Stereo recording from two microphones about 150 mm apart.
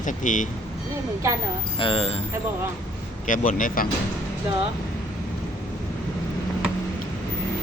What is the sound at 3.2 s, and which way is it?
Speech, 60° left (ahead or behind).